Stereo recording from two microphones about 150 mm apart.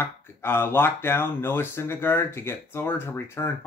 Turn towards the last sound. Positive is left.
turn(degrees=15)  # may be behind; listen again after turning